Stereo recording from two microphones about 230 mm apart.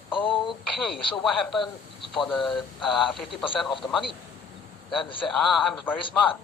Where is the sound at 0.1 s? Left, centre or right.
Left.